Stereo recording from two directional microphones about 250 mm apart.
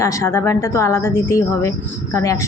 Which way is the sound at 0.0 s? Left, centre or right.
Centre.